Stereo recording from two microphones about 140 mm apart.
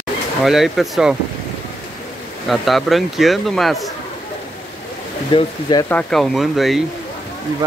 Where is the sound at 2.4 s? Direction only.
Centre (ahead or behind).